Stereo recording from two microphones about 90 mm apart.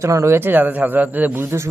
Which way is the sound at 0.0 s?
35° right (ahead or behind).